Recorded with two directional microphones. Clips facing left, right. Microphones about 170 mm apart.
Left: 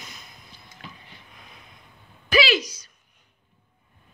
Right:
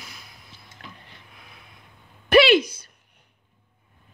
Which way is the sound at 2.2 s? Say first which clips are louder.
Right 7 dB; 60° right (ahead or behind).